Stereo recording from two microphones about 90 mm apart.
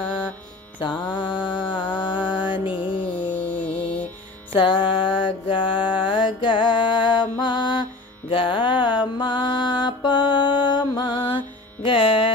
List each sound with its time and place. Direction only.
0.7 s mantra: 60° left (ahead or behind)
2.6 s music: 20° right (ahead or behind)
2.9 s music: 65° left (ahead or behind)
4.6 s mantra: 70° left (ahead or behind)
5.9 s music: 65° left (ahead or behind)
8.3 s mantra: 70° left (ahead or behind); by 11.3 s 55° left (ahead or behind)
11.8 s music: 80° left